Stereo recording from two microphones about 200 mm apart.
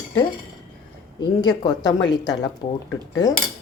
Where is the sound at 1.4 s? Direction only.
20° left (ahead or behind).